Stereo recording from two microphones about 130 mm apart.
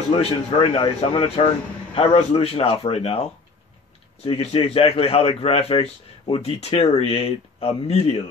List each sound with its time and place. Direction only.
0.1 s speech: 40° left (ahead or behind)